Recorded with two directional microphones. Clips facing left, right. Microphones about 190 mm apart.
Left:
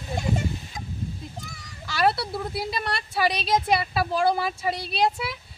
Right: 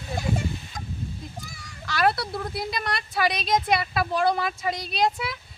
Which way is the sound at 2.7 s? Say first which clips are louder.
Even; 30° left (ahead or behind).